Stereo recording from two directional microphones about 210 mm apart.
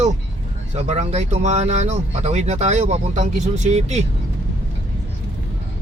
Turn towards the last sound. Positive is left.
turn(degrees=-30)  # may be behind; listen again after turning